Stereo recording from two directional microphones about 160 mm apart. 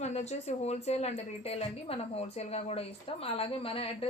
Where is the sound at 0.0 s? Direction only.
45° left (ahead or behind).